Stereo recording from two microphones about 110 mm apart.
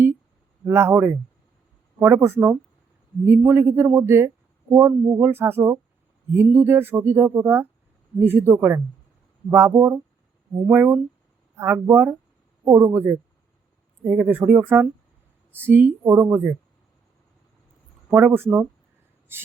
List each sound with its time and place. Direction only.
0.7 s speech: 20° right (ahead or behind)
18.1 s speech: 20° right (ahead or behind)